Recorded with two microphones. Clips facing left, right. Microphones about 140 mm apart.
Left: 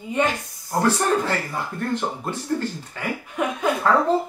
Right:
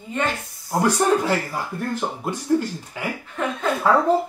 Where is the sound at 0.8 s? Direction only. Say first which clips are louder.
Right 1 dB; 10° right (ahead or behind).